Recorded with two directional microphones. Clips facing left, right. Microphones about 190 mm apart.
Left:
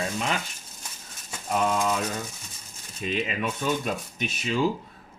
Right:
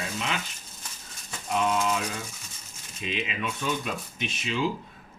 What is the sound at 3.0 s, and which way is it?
Speech, 45° left (ahead or behind).